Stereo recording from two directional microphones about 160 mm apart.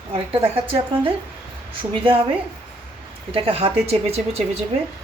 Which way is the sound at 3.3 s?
35° right (ahead or behind).